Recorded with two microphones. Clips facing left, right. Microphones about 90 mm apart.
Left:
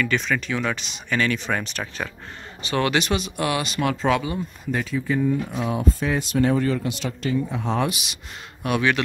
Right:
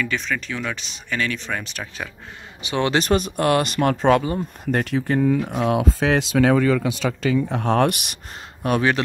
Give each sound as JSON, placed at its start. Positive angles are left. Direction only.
{"t": 0.0, "sound": "speech", "side_deg": 0}
{"t": 2.6, "sound": "a man's voice", "side_deg": -20}
{"t": 2.9, "sound": "speech", "side_deg": -40}
{"t": 4.6, "sound": "speech", "side_deg": -65}
{"t": 7.1, "sound": "speech", "side_deg": -65}
{"t": 8.6, "sound": "speech", "side_deg": -35}